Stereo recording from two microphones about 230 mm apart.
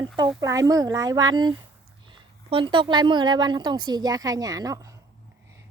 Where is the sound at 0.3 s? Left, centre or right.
Centre.